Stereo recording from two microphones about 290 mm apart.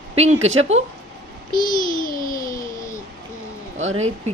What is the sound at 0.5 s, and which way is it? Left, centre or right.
Speech, right.